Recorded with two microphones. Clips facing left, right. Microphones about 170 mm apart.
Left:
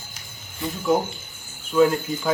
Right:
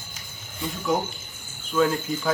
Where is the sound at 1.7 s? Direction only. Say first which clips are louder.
Left 4 dB; 10° left (ahead or behind).